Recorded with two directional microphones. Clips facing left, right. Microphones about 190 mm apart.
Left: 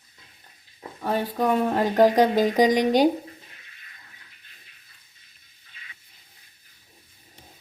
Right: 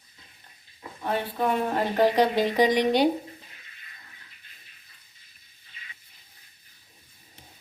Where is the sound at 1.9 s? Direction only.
45° left (ahead or behind).